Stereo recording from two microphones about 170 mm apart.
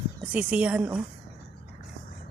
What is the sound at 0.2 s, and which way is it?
Speech, 5° right (ahead or behind).